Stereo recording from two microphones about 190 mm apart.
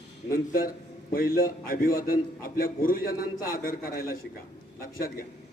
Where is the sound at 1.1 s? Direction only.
50° left (ahead or behind).